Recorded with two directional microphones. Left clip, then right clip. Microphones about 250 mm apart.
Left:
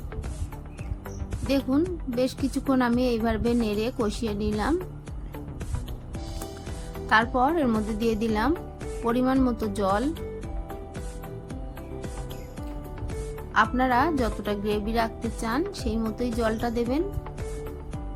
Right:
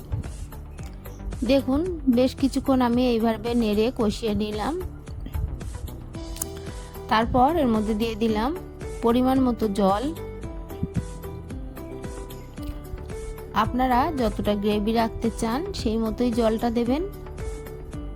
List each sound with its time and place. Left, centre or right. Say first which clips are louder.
1.5 s speech: right 3 dB; right
7.1 s speech: right 2 dB; right
13.5 s speech: even; right